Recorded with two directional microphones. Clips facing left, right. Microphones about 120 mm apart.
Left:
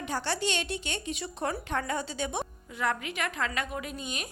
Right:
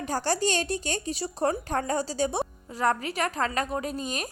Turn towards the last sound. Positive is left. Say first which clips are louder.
# right 6 dB
turn(degrees=-40)  # may be behind; listen again after turning